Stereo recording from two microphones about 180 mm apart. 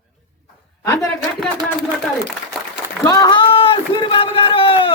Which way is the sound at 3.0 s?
20° left (ahead or behind).